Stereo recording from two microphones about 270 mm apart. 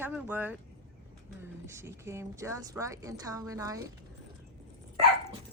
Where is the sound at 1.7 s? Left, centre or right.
Centre.